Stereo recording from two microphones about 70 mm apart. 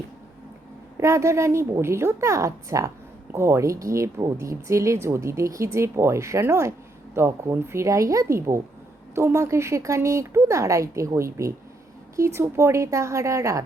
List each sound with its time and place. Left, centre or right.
0.9 s speech: right